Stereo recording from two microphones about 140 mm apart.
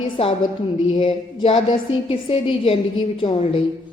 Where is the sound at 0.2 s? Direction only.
45° left (ahead or behind).